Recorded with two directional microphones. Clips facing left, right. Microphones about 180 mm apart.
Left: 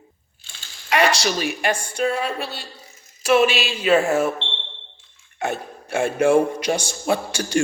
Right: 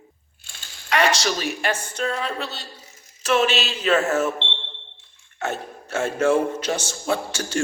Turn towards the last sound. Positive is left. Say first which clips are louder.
# left 2 dB
turn(degrees=15)  # may be behind; listen again after turning